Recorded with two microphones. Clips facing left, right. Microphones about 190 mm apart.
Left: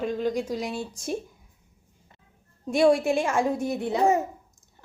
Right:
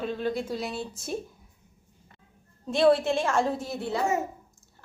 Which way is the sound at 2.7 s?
10° left (ahead or behind).